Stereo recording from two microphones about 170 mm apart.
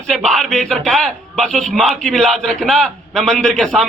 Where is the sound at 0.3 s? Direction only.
Centre (ahead or behind).